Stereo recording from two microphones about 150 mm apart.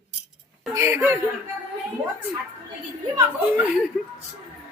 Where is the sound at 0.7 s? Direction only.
15° right (ahead or behind).